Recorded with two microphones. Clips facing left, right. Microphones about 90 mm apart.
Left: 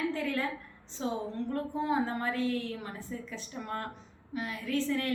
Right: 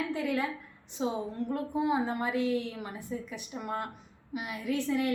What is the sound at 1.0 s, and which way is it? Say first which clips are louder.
A woman's voice: right 2 dB; 15° right (ahead or behind).